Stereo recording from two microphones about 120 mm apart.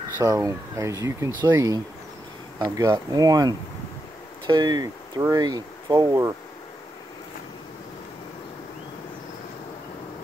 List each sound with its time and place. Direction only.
0.2 s speech: 25° right (ahead or behind)